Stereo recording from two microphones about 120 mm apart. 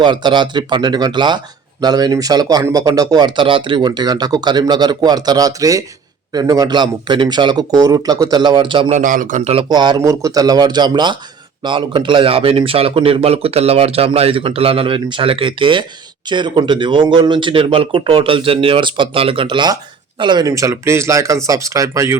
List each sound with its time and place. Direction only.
0.0 s speech: 40° right (ahead or behind)
8.9 s speech: 90° right
9.6 s speech: 35° right (ahead or behind)
20.5 s speech: 25° right (ahead or behind)